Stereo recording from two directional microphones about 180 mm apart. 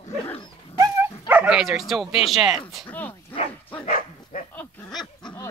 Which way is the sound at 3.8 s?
50° left (ahead or behind).